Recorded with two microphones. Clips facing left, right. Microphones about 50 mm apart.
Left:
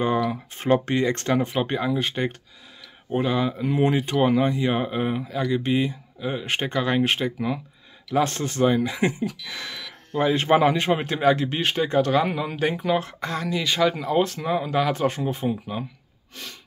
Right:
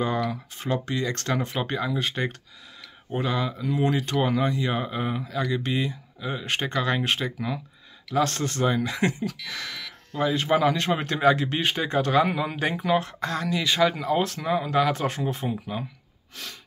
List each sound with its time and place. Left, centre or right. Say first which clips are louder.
0.6 s speech: left 7 dB; left
1.4 s speech: left 3 dB; centre
2.0 s a man's voice: left 2 dB; centre
3.5 s speech: left 3 dB; left
3.9 s speech: left 4 dB; centre; by 10.7 s left
10.7 s a man's voice: left 2 dB; centre